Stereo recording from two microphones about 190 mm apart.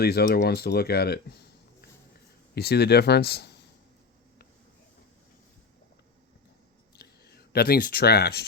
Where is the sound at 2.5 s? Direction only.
60° left (ahead or behind).